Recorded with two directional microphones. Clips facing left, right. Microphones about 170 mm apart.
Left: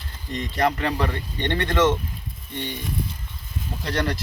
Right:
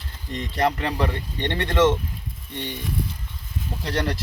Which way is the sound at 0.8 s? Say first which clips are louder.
Even; 15° right (ahead or behind).